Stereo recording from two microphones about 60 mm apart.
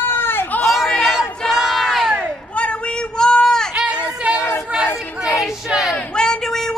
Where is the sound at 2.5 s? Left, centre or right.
Centre.